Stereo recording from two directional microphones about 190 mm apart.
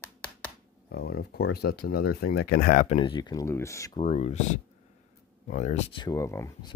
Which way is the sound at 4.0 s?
30° left (ahead or behind).